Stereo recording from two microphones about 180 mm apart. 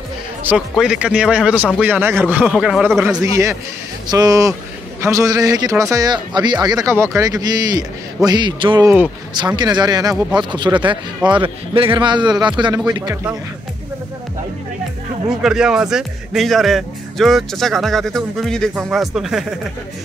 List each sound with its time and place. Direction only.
0.4 s speech: 5° right (ahead or behind)
3.0 s speech: 15° right (ahead or behind)
12.8 s speech: 15° right (ahead or behind)
15.2 s speech: 5° right (ahead or behind)